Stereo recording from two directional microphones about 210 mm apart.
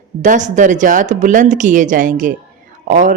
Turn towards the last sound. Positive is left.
turn(degrees=-40)  # may be behind; listen again after turning